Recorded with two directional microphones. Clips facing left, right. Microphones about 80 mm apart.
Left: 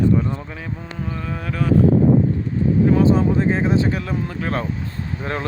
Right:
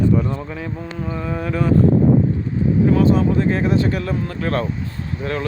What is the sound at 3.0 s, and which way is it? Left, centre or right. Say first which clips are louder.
Speech: even; left.